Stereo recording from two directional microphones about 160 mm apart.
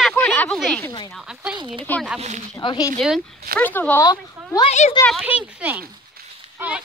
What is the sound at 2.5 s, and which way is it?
Speech, 25° left (ahead or behind).